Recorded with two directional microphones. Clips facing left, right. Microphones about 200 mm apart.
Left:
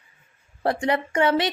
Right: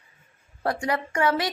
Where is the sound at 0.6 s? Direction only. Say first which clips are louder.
Left 3 dB; 25° left (ahead or behind).